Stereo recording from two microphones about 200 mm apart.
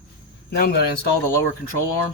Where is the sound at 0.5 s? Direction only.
50° left (ahead or behind).